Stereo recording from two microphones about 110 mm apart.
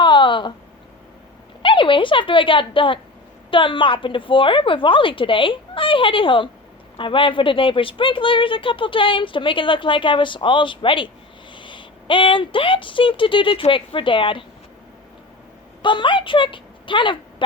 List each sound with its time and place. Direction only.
0.0 s a sound: 45° left (ahead or behind)
1.6 s a woman's voice: 50° left (ahead or behind)
15.8 s a woman's voice: 50° left (ahead or behind)